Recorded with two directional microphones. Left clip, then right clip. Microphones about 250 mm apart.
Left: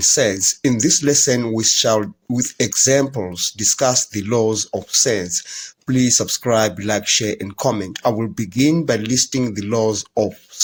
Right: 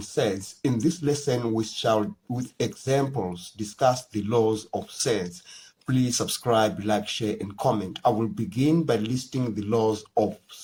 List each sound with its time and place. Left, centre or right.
0.2 s speech: left